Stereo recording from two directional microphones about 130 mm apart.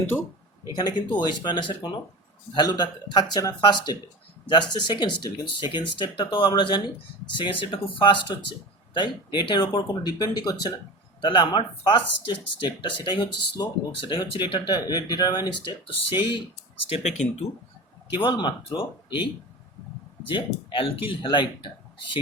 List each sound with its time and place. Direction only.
0.0 s speech: 15° left (ahead or behind)
0.8 s speech: 35° left (ahead or behind)
16.9 s speech: 60° left (ahead or behind)
18.2 s speech: 35° left (ahead or behind)
20.3 s speech: 40° left (ahead or behind)